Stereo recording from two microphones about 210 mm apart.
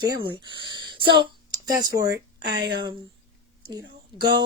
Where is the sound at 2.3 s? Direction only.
55° right (ahead or behind).